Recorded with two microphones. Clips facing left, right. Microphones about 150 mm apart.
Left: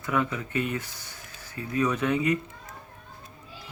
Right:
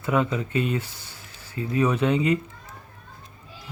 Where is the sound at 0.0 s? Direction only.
25° right (ahead or behind).